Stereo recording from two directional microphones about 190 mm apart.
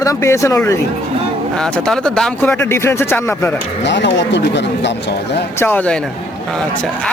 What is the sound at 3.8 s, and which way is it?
Speech, 65° left (ahead or behind).